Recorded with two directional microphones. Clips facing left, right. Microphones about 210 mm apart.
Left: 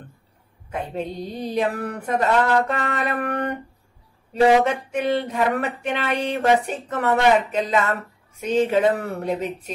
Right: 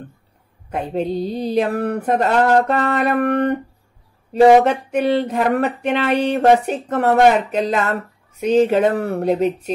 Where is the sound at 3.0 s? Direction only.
60° right (ahead or behind).